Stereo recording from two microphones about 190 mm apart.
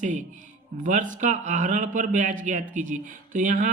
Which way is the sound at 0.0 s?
40° right (ahead or behind).